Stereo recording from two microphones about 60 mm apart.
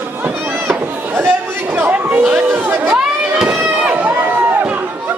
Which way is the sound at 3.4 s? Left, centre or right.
Centre.